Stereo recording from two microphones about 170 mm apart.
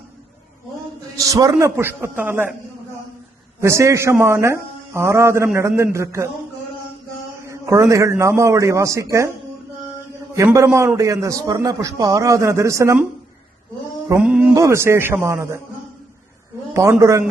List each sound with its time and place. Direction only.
1.2 s a man's voice: 20° right (ahead or behind)
3.6 s a man's voice: 15° right (ahead or behind)
7.4 s a man's voice: 15° right (ahead or behind)
10.3 s a man's voice: 15° right (ahead or behind)
14.2 s music: 5° right (ahead or behind)
14.5 s a man's voice: 15° right (ahead or behind)
16.7 s a man's voice: 15° right (ahead or behind)